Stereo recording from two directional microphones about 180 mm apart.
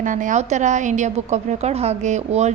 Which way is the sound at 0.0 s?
45° right (ahead or behind).